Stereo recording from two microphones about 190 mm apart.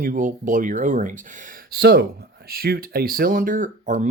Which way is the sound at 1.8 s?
60° right (ahead or behind).